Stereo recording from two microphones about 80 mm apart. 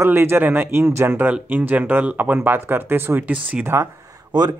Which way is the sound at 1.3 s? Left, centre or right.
Centre.